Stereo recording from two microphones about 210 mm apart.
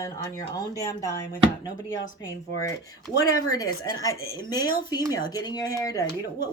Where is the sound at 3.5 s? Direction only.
15° left (ahead or behind).